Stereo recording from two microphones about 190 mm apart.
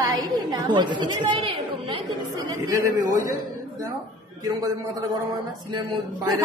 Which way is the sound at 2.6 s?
20° right (ahead or behind).